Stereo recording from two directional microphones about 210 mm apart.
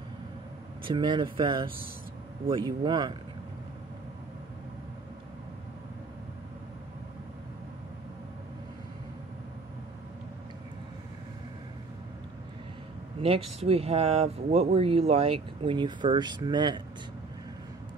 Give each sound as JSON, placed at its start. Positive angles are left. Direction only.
{"t": 0.8, "sound": "speech", "side_deg": -20}
{"t": 13.2, "sound": "speech", "side_deg": -25}